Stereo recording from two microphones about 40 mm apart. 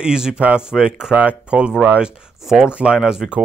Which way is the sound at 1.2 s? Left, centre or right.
Right.